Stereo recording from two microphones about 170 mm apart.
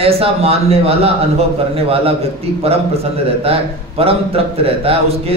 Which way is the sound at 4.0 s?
35° right (ahead or behind).